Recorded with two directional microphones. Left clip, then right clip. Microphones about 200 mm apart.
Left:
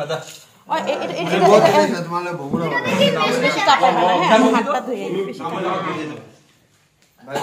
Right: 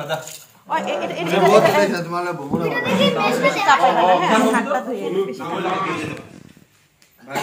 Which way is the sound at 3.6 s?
25° left (ahead or behind).